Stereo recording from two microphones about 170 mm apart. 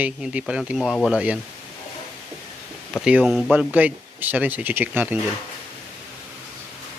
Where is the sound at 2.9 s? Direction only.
5° right (ahead or behind).